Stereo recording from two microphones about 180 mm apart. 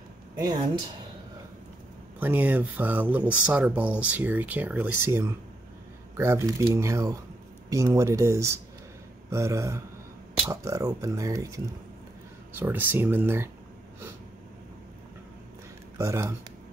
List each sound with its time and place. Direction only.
2.1 s speech: 10° right (ahead or behind)
16.0 s speech: 15° right (ahead or behind)